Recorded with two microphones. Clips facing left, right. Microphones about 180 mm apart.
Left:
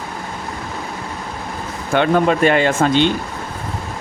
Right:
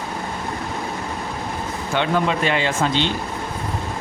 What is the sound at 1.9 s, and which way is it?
Speech, 50° left (ahead or behind).